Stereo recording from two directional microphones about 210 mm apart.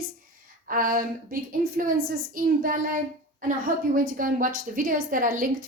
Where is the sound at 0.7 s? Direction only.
40° right (ahead or behind).